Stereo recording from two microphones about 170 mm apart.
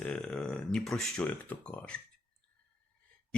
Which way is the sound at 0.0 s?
5° left (ahead or behind).